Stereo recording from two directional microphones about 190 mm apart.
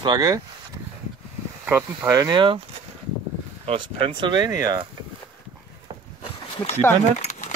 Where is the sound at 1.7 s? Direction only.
15° right (ahead or behind).